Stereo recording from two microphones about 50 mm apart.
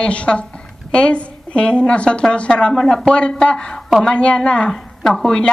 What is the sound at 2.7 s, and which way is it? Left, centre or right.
A woman's voice, centre.